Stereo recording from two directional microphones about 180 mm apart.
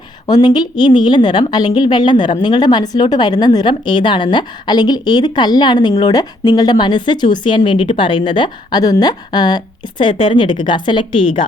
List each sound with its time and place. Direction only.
0.3 s a woman's voice: 20° left (ahead or behind)